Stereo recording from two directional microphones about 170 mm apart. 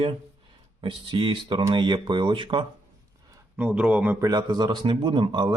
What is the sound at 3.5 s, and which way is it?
Speech, 10° right (ahead or behind).